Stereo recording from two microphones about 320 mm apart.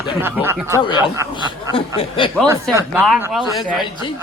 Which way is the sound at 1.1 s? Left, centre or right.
Centre.